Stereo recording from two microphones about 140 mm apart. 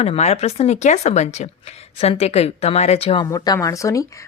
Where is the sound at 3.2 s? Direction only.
30° left (ahead or behind).